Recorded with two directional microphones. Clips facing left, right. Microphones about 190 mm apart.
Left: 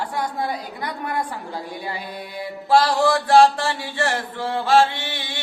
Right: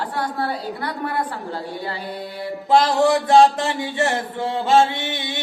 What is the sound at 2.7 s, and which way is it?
Mantra, 20° right (ahead or behind).